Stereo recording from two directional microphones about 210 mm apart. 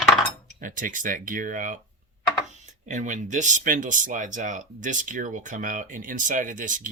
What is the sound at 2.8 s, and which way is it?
Speech, 35° right (ahead or behind).